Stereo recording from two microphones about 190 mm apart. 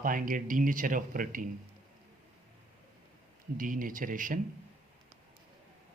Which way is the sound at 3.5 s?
45° right (ahead or behind).